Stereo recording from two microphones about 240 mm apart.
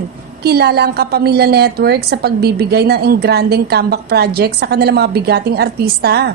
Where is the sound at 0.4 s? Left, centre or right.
Right.